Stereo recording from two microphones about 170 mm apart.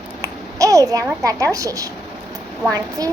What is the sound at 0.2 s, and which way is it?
Babbling, 20° right (ahead or behind).